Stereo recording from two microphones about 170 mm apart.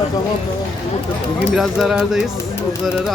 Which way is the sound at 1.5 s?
Centre (ahead or behind).